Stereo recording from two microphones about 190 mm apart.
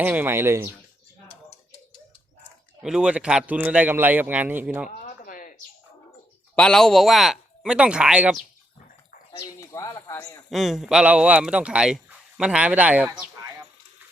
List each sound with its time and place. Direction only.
0.0 s a man's voice: 10° right (ahead or behind)
2.8 s a man's voice: 5° right (ahead or behind)
4.9 s a sound: 45° left (ahead or behind)
6.6 s speech: 5° left (ahead or behind)
9.6 s speech: 15° left (ahead or behind)
10.5 s speech: centre (ahead or behind)